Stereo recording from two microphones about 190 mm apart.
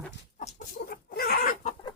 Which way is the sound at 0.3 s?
45° left (ahead or behind).